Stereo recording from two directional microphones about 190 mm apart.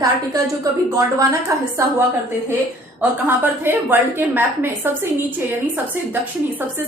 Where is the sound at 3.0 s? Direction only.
10° right (ahead or behind).